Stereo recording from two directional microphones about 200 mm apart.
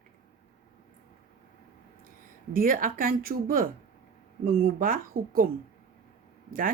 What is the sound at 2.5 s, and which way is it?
A woman's voice, 45° right (ahead or behind).